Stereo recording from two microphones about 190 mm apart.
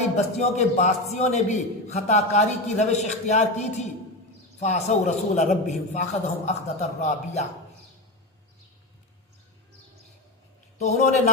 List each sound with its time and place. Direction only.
0.3 s a man's voice: 35° left (ahead or behind)
10.8 s a man's voice: 35° left (ahead or behind)